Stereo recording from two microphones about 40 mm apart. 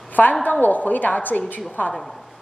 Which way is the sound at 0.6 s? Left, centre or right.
Left.